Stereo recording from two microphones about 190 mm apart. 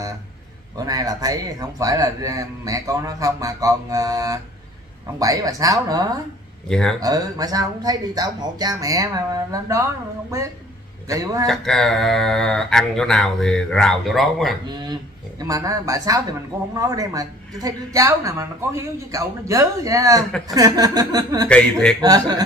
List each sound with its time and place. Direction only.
0.7 s speech: 20° right (ahead or behind)
6.7 s speech: 5° left (ahead or behind)
7.0 s speech: 20° right (ahead or behind)
11.4 s speech: centre (ahead or behind)
14.9 s speech: 20° right (ahead or behind)
21.5 s speech: 5° left (ahead or behind)
22.0 s speech: 20° right (ahead or behind)